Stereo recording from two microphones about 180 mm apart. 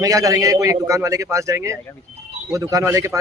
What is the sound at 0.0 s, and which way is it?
A man's voice, 20° right (ahead or behind).